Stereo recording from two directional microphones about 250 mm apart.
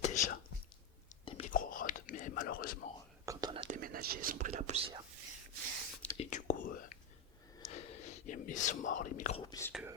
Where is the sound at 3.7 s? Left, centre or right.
Right.